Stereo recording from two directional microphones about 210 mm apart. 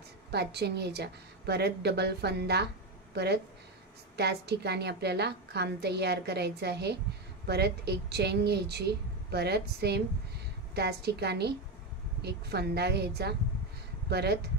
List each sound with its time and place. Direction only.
0.3 s a woman's voice: 50° right (ahead or behind)